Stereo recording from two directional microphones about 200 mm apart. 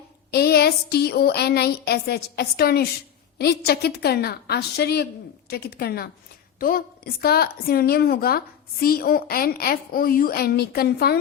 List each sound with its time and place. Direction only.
0.3 s a woman's voice: 55° left (ahead or behind)